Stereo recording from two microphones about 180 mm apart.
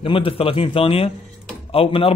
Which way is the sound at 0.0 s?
30° left (ahead or behind).